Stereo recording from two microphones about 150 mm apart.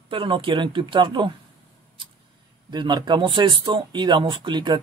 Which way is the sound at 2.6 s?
30° right (ahead or behind).